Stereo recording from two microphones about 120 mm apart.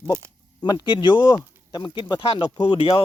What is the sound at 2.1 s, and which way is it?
Speech, 50° left (ahead or behind).